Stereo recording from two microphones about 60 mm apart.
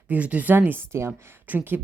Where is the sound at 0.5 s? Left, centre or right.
Right.